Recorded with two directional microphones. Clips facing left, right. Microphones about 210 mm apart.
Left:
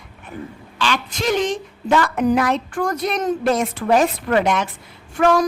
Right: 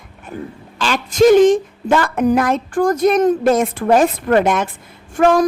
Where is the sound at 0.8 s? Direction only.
45° right (ahead or behind).